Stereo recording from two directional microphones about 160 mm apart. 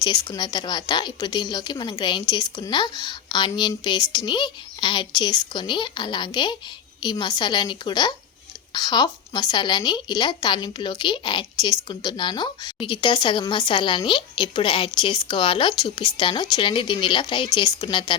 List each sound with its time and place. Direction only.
0.0 s a woman's voice: 25° left (ahead or behind)